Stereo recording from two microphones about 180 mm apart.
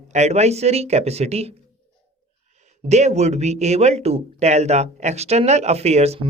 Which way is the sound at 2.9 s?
40° right (ahead or behind).